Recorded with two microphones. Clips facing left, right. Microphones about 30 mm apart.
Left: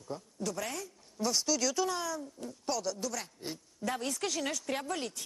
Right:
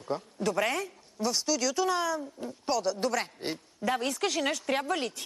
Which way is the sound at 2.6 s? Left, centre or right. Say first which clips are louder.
Right 5 dB; centre.